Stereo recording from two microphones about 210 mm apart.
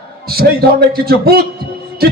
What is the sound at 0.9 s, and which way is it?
Speech, 45° right (ahead or behind).